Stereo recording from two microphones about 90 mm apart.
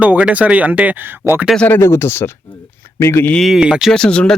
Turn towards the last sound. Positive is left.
turn(degrees=10)  # may be behind; listen again after turning